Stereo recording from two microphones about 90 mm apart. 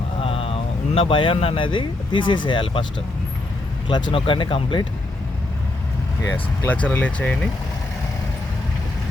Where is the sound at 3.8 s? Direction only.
70° left (ahead or behind).